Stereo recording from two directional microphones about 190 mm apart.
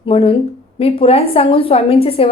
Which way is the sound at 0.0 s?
30° left (ahead or behind).